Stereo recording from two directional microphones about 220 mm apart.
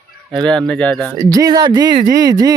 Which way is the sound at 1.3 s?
15° right (ahead or behind).